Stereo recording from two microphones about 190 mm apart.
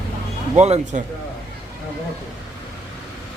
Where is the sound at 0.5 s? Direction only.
35° right (ahead or behind).